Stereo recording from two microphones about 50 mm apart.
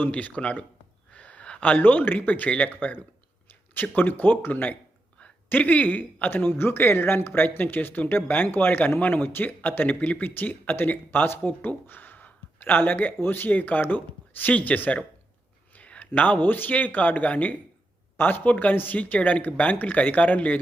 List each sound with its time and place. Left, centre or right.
0.1 s speech: left
1.1 s a sound: left
1.8 s speech: left